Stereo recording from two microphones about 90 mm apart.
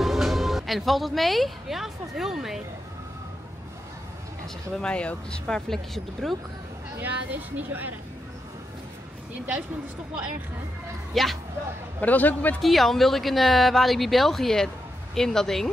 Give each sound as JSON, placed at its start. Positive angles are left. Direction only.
{"t": 0.0, "sound": "speech", "side_deg": 0}
{"t": 4.7, "sound": "speech", "side_deg": 10}
{"t": 7.0, "sound": "a woman's voice", "side_deg": -20}
{"t": 11.1, "sound": "speech", "side_deg": 0}
{"t": 12.0, "sound": "speech", "side_deg": 20}
{"t": 12.6, "sound": "speech", "side_deg": 0}